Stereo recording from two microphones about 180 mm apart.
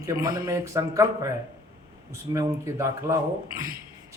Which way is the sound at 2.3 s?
15° right (ahead or behind).